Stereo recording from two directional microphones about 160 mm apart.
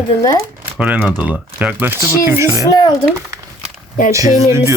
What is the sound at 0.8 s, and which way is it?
Speech, 10° right (ahead or behind).